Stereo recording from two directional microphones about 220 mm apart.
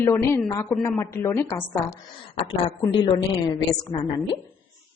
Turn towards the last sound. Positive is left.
turn(degrees=20)  # may be behind; listen again after turning